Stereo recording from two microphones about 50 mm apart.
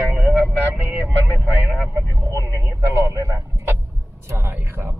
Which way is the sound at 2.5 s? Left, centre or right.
Right.